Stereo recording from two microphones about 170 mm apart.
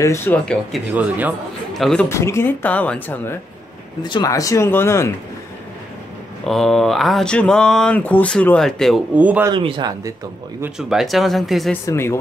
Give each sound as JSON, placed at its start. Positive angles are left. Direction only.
{"t": 0.0, "sound": "speech", "side_deg": 15}
{"t": 1.7, "sound": "a man's voice", "side_deg": 0}
{"t": 2.0, "sound": "speech", "side_deg": 15}
{"t": 4.0, "sound": "speech", "side_deg": 25}
{"t": 6.4, "sound": "speech", "side_deg": 0}
{"t": 9.1, "sound": "speech", "side_deg": -10}
{"t": 9.5, "sound": "speech", "side_deg": -30}
{"t": 10.6, "sound": "speech", "side_deg": -5}
{"t": 11.8, "sound": "speech", "side_deg": 15}